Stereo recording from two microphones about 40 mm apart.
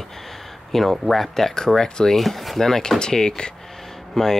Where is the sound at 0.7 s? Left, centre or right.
Centre.